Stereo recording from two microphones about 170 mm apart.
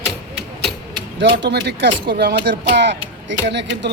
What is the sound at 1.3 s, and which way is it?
Speech, 80° right.